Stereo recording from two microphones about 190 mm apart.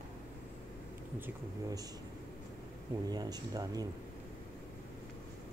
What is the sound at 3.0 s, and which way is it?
Speech, 20° right (ahead or behind).